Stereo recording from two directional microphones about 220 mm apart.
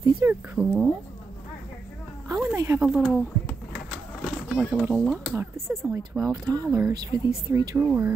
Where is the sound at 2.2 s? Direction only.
15° right (ahead or behind).